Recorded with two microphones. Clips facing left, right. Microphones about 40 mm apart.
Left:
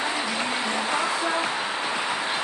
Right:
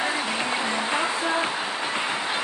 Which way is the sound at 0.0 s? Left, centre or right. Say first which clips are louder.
Right 1 dB; right.